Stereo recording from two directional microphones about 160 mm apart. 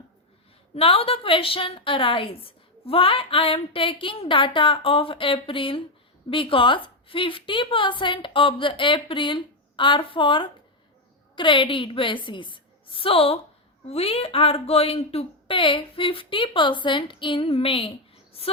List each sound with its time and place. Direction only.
0.8 s a woman's voice: 35° left (ahead or behind)